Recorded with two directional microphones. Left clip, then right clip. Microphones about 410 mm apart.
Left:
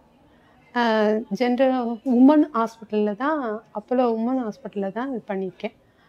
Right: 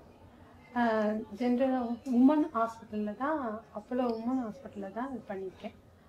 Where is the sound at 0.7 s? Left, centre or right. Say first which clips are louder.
Left 9 dB; left.